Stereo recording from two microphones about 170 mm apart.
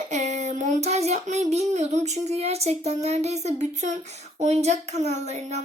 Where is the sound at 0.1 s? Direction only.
40° right (ahead or behind).